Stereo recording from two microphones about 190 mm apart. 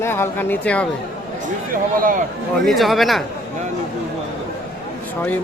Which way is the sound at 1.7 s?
45° right (ahead or behind).